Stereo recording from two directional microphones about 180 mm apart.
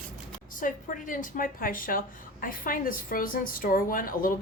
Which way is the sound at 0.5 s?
50° left (ahead or behind).